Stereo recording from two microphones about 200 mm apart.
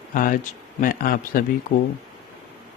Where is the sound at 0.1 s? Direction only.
45° left (ahead or behind).